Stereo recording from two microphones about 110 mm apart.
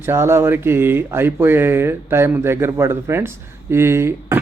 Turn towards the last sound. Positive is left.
turn(degrees=-25)  # may be behind; listen again after turning